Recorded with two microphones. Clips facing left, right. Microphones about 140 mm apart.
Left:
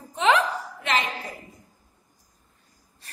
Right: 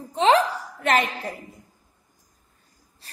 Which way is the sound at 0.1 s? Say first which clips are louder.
Right 3 dB; 35° right (ahead or behind).